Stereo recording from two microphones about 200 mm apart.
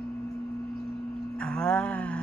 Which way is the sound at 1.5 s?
5° left (ahead or behind).